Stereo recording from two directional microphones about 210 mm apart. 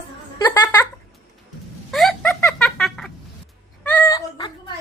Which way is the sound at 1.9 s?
Centre (ahead or behind).